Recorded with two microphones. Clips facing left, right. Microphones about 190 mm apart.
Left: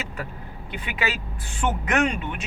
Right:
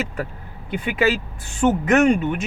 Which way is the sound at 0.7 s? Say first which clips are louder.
Right 9 dB; 50° right (ahead or behind).